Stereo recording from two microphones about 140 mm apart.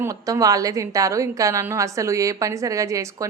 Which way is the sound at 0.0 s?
25° right (ahead or behind).